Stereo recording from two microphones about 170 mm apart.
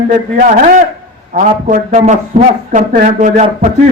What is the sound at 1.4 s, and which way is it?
A man's voice, 45° right (ahead or behind).